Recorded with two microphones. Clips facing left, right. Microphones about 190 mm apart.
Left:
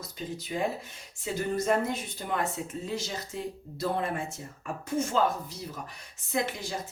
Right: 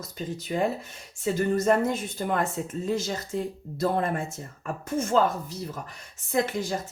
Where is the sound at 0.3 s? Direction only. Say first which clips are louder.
Right 4 dB; 50° right (ahead or behind).